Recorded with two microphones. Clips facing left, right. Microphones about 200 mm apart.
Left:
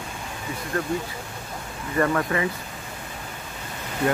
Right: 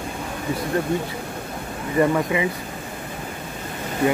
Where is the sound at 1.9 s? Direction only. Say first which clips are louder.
Right 3 dB; 15° right (ahead or behind).